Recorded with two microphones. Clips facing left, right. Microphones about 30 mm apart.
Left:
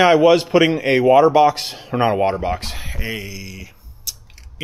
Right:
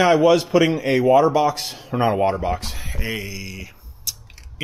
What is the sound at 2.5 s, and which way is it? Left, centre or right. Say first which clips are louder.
Speech: left 2 dB; left.